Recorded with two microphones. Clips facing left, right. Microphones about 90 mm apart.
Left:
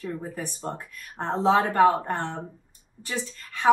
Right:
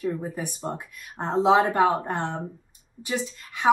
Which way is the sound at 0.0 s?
10° right (ahead or behind).